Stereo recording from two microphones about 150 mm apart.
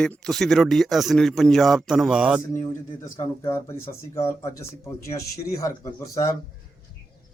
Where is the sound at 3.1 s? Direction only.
15° left (ahead or behind).